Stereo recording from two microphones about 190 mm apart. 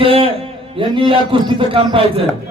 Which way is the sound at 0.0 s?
30° right (ahead or behind).